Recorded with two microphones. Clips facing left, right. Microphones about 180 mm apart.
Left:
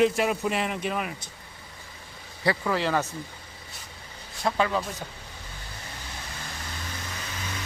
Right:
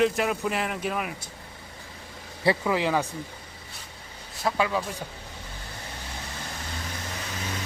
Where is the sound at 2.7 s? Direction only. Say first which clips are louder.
Right 1 dB; 10° right (ahead or behind).